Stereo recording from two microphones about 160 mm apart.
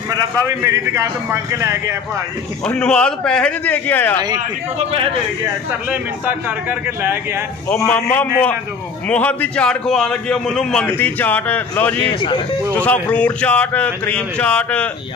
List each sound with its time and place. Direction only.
0.6 s a man's voice: 20° right (ahead or behind)
2.6 s a man's voice: 5° left (ahead or behind)
5.7 s speech: 10° right (ahead or behind)
7.7 s a man's voice: 5° left (ahead or behind)
12.0 s speech: 30° left (ahead or behind)
12.7 s a man's voice: 10° left (ahead or behind)